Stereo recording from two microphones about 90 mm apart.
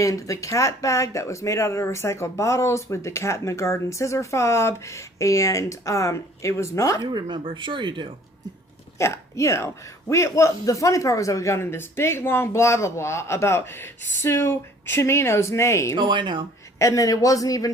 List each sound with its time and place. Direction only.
0.0 s speech: 35° left (ahead or behind)
7.0 s speech: 55° right (ahead or behind)
9.0 s speech: 35° left (ahead or behind)
16.0 s speech: 60° right (ahead or behind)
16.7 s speech: 35° left (ahead or behind)